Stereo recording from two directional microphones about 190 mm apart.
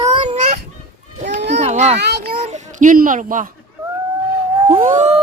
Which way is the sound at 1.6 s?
35° right (ahead or behind).